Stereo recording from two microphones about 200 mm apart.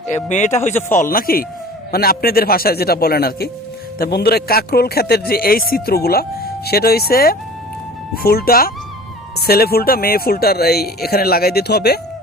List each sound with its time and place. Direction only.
0.3 s speech: 35° left (ahead or behind)
1.0 s a man's voice: 45° left (ahead or behind)